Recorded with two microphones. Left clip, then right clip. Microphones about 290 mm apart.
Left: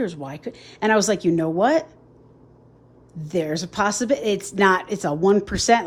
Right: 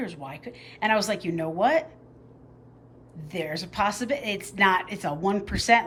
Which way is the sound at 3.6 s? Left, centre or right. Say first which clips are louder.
Left 4 dB; left.